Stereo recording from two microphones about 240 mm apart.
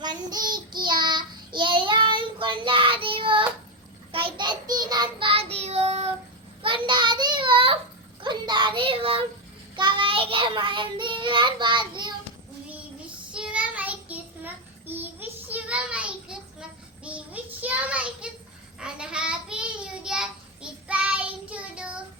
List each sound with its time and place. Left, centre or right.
0.0 s child singing: centre
13.3 s child singing: centre